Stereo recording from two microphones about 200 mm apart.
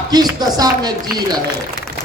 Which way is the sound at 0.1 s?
20° right (ahead or behind).